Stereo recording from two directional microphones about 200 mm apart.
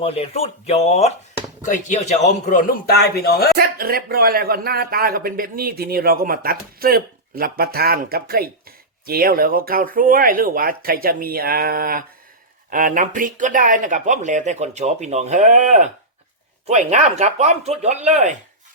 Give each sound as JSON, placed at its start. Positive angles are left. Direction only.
{"t": 0.0, "sound": "a man's voice", "side_deg": 30}
{"t": 3.6, "sound": "speech", "side_deg": -50}